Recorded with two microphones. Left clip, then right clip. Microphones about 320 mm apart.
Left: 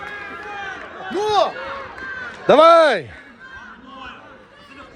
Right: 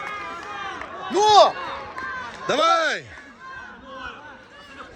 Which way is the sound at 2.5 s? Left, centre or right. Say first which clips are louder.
Left 9 dB; centre.